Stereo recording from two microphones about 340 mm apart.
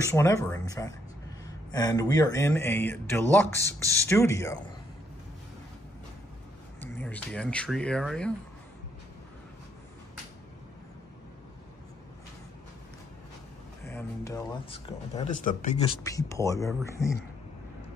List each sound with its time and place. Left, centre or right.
0.0 s speech: centre
6.8 s speech: centre
13.8 s speech: centre
15.2 s speech: left
16.0 s speech: centre